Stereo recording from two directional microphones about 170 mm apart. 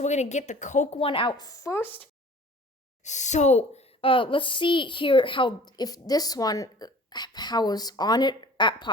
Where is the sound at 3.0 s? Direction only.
45° left (ahead or behind).